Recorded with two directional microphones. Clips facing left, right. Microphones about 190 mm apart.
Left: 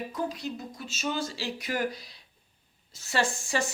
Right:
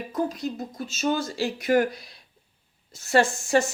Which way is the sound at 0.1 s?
45° right (ahead or behind).